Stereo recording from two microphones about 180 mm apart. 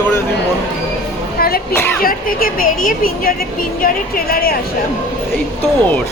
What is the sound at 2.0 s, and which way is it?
A woman's voice, 55° left (ahead or behind).